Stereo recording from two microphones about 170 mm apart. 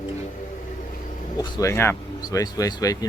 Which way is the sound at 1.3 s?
20° left (ahead or behind).